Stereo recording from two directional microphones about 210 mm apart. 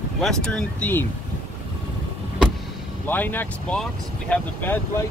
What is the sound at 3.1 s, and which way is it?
Speech, 10° left (ahead or behind).